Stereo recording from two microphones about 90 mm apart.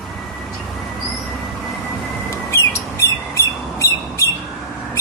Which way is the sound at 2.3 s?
30° left (ahead or behind).